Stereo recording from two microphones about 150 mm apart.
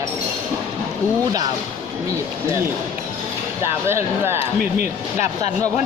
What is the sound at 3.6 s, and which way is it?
Speech, 15° right (ahead or behind).